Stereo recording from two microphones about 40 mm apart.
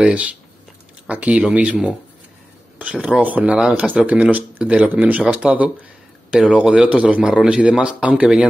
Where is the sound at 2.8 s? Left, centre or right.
Right.